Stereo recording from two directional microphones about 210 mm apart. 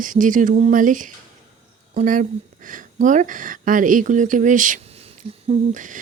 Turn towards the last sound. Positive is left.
turn(degrees=-40)  # may be behind; listen again after turning